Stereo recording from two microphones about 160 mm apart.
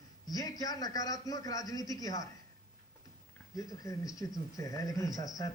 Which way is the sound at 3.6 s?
20° left (ahead or behind).